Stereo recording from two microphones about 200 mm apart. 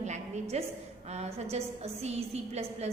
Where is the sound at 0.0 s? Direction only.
35° right (ahead or behind).